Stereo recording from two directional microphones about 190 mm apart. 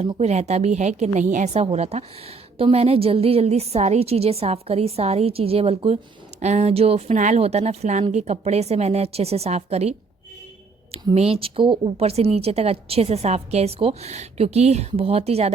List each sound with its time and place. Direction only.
0.0 s speech: 35° right (ahead or behind)
10.9 s speech: 30° right (ahead or behind)